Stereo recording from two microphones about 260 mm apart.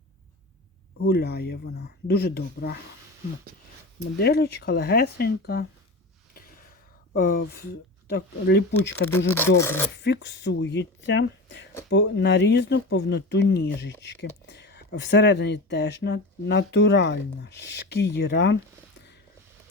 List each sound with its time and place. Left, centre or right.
0.9 s speech: left
4.2 s speech: left
7.1 s speech: left
9.6 s speech: centre
10.0 s speech: left